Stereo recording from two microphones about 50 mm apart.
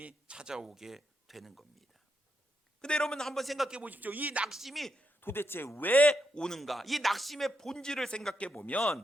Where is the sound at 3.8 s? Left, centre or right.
Right.